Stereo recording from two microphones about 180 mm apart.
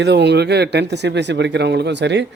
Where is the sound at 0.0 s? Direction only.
70° right (ahead or behind).